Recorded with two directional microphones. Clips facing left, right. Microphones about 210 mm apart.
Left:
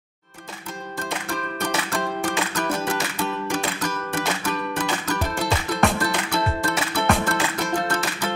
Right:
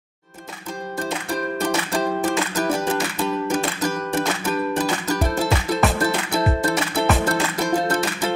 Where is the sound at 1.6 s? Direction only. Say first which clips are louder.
Right 3 dB; 25° right (ahead or behind).